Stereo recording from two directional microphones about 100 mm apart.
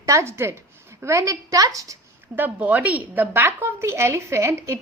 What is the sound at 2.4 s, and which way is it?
A woman's voice, 15° right (ahead or behind).